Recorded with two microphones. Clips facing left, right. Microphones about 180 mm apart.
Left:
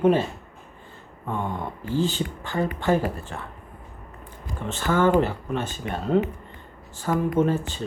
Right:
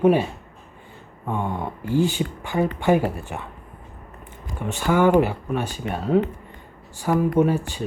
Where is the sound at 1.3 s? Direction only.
15° right (ahead or behind).